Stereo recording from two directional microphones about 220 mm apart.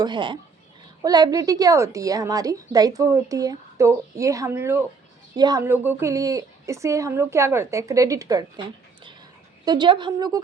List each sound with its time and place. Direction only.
0.0 s a woman's voice: 20° right (ahead or behind)